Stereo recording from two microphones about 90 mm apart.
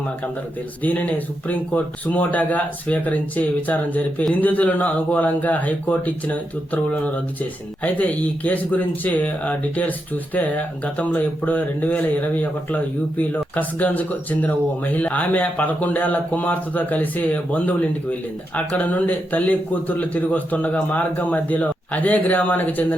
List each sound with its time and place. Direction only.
0.8 s speech: 15° left (ahead or behind)
10.9 s speech: 15° left (ahead or behind)